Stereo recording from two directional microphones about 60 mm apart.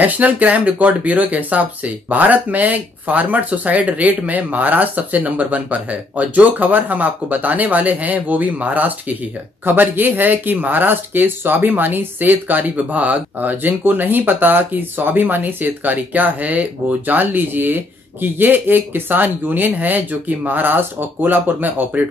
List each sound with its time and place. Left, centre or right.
0.0 s speech: right